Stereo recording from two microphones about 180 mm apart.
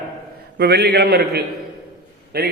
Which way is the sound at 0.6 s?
65° right (ahead or behind).